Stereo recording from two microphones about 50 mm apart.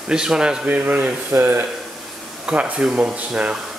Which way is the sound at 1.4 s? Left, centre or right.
Right.